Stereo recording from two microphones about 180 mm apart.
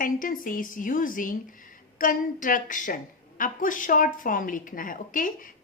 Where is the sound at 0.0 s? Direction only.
50° left (ahead or behind).